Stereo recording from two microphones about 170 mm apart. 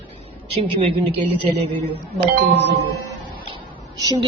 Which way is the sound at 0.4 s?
35° right (ahead or behind).